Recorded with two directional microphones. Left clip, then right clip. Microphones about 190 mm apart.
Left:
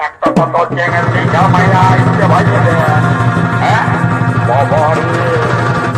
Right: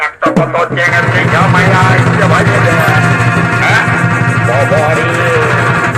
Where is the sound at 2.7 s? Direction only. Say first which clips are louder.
Right 2 dB; 25° right (ahead or behind).